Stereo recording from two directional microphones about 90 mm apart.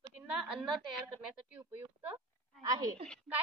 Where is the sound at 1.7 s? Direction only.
20° right (ahead or behind).